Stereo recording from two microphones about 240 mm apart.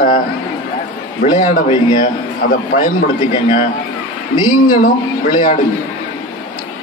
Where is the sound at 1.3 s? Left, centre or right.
Left.